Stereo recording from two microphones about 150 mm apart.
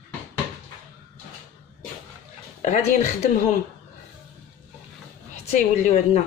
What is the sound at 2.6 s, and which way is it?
Speech, 50° left (ahead or behind).